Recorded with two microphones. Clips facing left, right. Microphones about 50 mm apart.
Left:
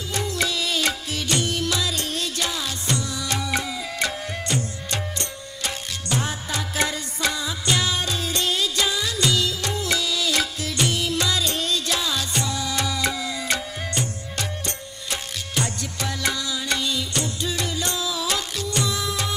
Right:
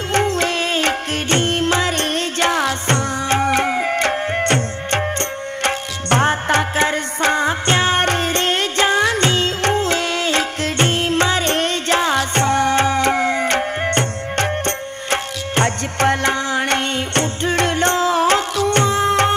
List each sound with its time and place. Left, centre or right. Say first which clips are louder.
0.1 s music: right 8 dB; right